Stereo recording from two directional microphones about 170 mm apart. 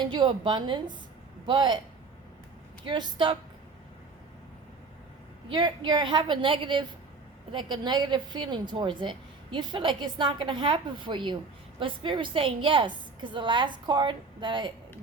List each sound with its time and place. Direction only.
0.0 s a woman's voice: 30° right (ahead or behind)
2.8 s a woman's voice: 30° right (ahead or behind)
5.5 s a woman's voice: 30° right (ahead or behind)